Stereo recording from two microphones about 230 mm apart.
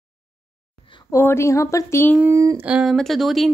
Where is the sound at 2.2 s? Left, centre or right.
Centre.